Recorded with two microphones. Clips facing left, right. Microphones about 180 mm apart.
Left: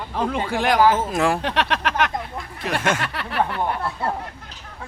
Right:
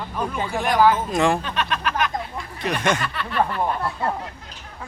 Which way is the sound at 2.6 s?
5° left (ahead or behind).